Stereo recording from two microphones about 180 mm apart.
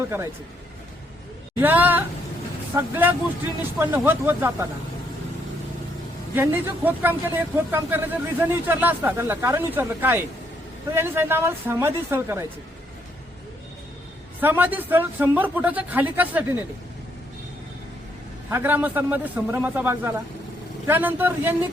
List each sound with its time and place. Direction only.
1.5 s speech: 10° right (ahead or behind)
6.3 s speech: 10° right (ahead or behind)
14.4 s speech: 10° right (ahead or behind)
18.5 s speech: 10° right (ahead or behind)